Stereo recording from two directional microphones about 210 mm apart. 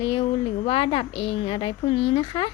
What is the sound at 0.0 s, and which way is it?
A woman's voice, 25° left (ahead or behind).